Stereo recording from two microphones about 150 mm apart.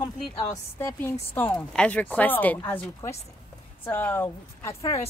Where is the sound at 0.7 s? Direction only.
15° left (ahead or behind).